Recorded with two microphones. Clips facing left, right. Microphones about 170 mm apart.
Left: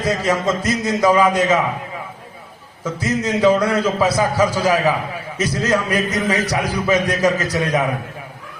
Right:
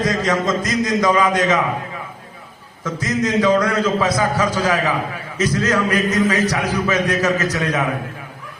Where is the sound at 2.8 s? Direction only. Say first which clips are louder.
Even; 10° left (ahead or behind).